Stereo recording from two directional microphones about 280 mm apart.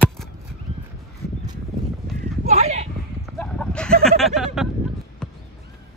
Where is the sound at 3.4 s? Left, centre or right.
Centre.